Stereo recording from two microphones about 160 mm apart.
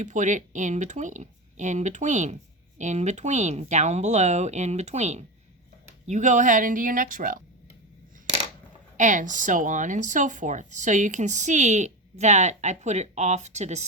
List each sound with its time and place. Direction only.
0.0 s speech: 50° right (ahead or behind)
9.0 s speech: 50° right (ahead or behind)